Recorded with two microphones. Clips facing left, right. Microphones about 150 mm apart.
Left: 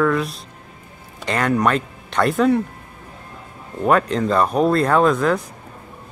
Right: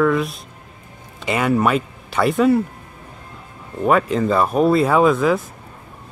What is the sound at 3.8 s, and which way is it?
Speech, centre (ahead or behind).